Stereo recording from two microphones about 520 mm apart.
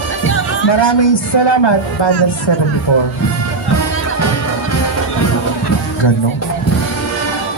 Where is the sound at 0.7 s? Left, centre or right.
Left.